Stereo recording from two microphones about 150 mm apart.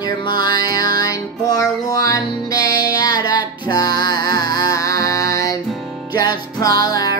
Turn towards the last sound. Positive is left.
turn(degrees=25)  # may be behind; listen again after turning